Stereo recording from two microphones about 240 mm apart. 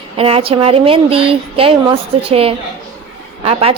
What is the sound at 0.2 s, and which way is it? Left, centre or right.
A woman's voice, right.